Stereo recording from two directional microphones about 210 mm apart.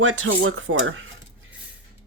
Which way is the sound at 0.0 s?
70° right (ahead or behind).